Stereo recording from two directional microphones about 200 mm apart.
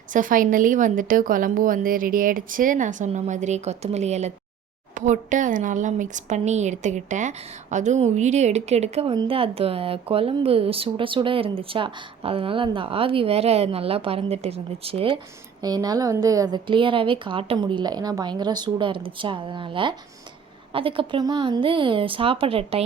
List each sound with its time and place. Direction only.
0.1 s a woman's voice: 40° right (ahead or behind)